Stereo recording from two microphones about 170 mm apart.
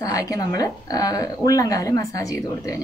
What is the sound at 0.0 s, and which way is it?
A woman's voice, 20° left (ahead or behind).